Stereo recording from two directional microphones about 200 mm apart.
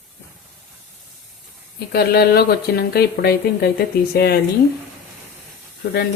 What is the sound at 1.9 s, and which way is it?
Speech, 50° left (ahead or behind).